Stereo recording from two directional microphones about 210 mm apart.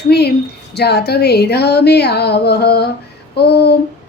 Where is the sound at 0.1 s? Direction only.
50° left (ahead or behind).